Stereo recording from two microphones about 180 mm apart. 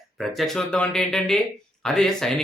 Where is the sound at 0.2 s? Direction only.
Centre (ahead or behind).